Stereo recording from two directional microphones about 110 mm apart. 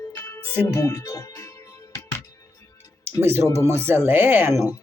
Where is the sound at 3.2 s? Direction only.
20° right (ahead or behind).